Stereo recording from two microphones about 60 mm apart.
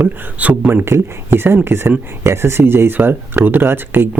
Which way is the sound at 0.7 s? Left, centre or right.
Right.